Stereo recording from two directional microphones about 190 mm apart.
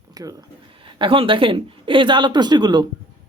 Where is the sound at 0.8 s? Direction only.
25° right (ahead or behind).